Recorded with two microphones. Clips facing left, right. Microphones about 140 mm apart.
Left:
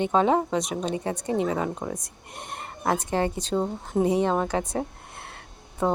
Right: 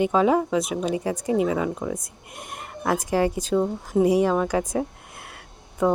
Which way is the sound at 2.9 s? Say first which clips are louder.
Right 3 dB; 25° left (ahead or behind).